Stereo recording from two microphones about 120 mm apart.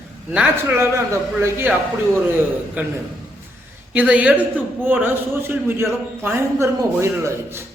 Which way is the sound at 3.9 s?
10° right (ahead or behind).